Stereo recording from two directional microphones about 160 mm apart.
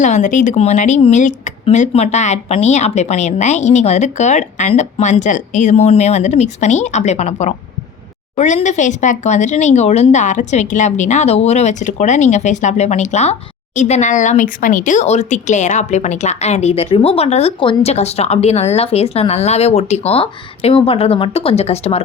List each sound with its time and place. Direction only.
0.0 s speech: 50° left (ahead or behind)